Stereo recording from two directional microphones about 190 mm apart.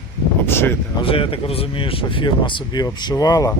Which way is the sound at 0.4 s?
10° left (ahead or behind).